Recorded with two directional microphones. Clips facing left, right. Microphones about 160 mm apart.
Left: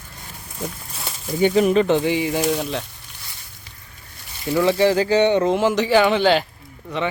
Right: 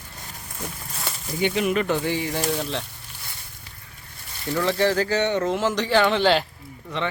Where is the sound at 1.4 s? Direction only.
40° left (ahead or behind); by 2.4 s 15° left (ahead or behind).